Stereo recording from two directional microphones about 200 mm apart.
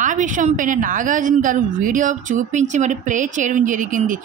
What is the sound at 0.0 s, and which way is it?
Speech, 40° right (ahead or behind).